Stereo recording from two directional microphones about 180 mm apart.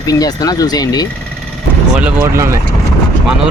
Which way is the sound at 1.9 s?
5° right (ahead or behind).